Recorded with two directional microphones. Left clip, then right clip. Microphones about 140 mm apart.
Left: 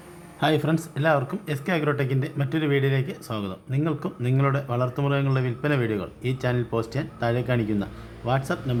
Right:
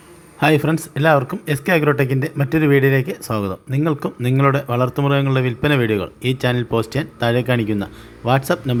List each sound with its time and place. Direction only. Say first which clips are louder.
0.3 s speech: right 7 dB; 35° right (ahead or behind)
8.3 s speech: right 8 dB; 50° right (ahead or behind)